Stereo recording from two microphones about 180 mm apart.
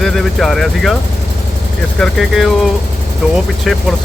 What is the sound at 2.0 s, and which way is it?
Speech, centre (ahead or behind).